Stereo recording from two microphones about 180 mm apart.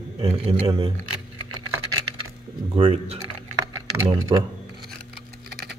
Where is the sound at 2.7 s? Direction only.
30° right (ahead or behind).